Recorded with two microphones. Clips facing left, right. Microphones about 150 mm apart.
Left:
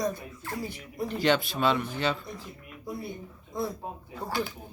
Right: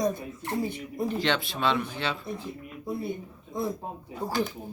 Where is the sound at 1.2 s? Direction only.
Centre (ahead or behind).